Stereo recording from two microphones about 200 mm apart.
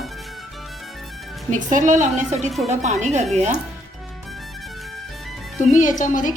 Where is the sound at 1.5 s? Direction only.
40° right (ahead or behind).